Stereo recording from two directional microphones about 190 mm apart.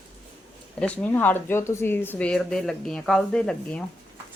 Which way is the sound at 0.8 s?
5° left (ahead or behind).